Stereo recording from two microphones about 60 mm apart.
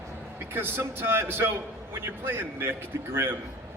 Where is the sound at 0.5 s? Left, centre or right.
Right.